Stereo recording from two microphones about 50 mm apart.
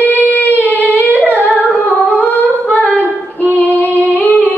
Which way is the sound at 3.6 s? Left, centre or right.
Right.